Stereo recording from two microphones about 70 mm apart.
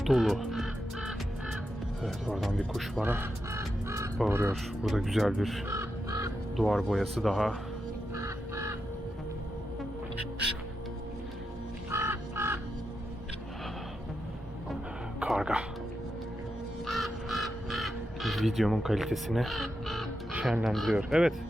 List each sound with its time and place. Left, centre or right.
0.0 s speech: centre
2.3 s speech: centre
3.0 s speech: right
3.6 s music: right
4.3 s speech: right
4.9 s speech: centre
5.6 s crow: right
6.6 s speech: centre
8.1 s bird: right
11.9 s crow: right
15.3 s music: centre
16.8 s crow: centre
20.4 s speech: centre